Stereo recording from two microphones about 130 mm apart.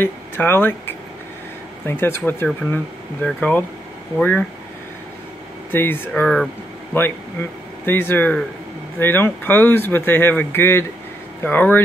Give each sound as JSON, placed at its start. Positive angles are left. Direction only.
{"t": 0.0, "sound": "speech", "side_deg": 15}
{"t": 5.7, "sound": "speech", "side_deg": 15}
{"t": 6.2, "sound": "speech", "side_deg": 5}
{"t": 7.8, "sound": "speech", "side_deg": 15}